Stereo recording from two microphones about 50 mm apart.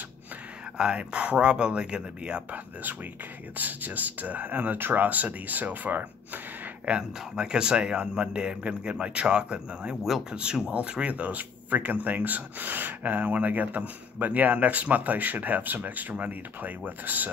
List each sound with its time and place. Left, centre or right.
0.7 s a man's voice: right
2.5 s speech: right
6.9 s a man's voice: centre; by 17.3 s right